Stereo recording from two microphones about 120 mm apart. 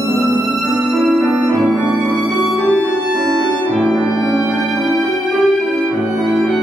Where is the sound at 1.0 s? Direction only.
Centre (ahead or behind).